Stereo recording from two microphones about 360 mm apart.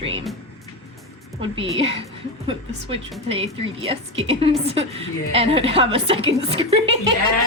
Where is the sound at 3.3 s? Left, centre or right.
Centre.